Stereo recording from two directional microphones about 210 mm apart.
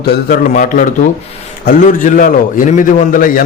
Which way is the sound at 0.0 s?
45° left (ahead or behind).